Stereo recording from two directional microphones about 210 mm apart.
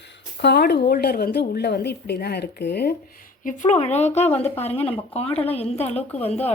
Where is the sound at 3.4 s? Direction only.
35° left (ahead or behind).